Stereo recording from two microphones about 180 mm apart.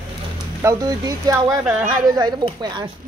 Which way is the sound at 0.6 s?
20° right (ahead or behind).